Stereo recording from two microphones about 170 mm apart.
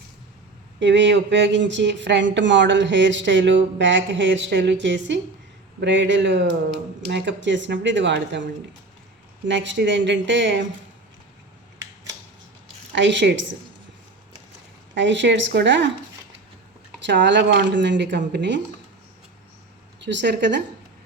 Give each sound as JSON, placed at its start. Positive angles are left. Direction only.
{"t": 0.8, "sound": "speech", "side_deg": -90}
{"t": 9.5, "sound": "speech", "side_deg": -90}
{"t": 12.9, "sound": "speech", "side_deg": -90}
{"t": 14.9, "sound": "speech", "side_deg": -90}
{"t": 17.0, "sound": "speech", "side_deg": -90}
{"t": 20.0, "sound": "speech", "side_deg": -90}